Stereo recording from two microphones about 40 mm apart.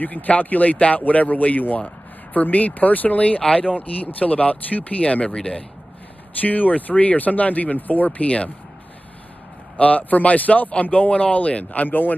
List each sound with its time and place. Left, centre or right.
0.0 s speech: left
6.4 s speech: left
9.8 s speech: left